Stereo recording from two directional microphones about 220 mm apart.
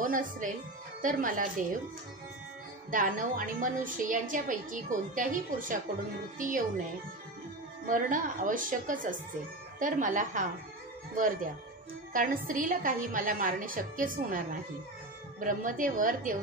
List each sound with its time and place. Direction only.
0.0 s a woman's voice: 35° right (ahead or behind)
2.9 s a woman's voice: 35° right (ahead or behind)
7.8 s a woman's voice: 35° right (ahead or behind)
12.1 s a woman's voice: 40° right (ahead or behind)